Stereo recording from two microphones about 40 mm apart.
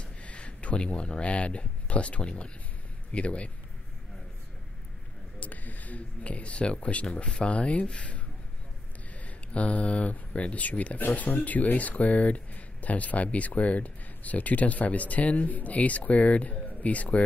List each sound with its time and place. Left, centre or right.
0.0 s speech: left
5.4 s speech: left
9.2 s speech: left